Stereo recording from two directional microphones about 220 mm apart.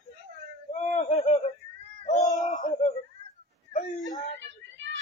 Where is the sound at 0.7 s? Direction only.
30° left (ahead or behind).